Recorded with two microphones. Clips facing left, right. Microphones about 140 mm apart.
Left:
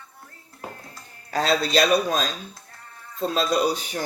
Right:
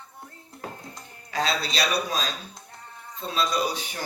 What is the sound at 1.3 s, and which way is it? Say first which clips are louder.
A man's voice: left 6 dB; 45° left (ahead or behind).